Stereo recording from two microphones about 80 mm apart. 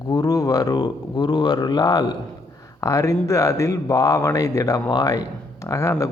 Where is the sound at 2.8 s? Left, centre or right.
Left.